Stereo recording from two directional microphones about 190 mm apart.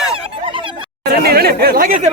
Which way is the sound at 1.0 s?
55° right (ahead or behind).